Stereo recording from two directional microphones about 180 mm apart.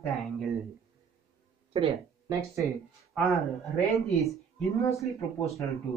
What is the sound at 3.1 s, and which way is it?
Speech, 5° left (ahead or behind).